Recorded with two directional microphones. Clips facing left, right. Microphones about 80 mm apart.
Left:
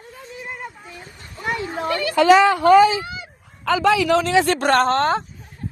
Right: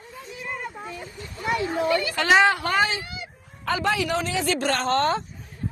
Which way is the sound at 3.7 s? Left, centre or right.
Left.